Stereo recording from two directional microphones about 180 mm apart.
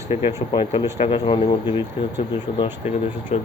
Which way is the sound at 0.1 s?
35° left (ahead or behind).